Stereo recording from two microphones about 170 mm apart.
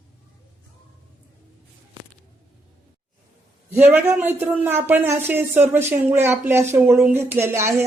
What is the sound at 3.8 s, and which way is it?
Speech, 10° right (ahead or behind).